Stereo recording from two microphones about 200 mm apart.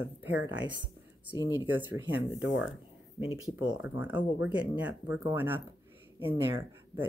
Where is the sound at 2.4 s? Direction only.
65° left (ahead or behind).